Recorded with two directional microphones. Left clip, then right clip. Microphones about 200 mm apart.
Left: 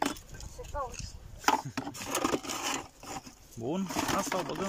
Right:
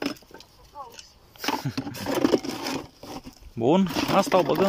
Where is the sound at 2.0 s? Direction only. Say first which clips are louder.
Right 9 dB; 30° right (ahead or behind).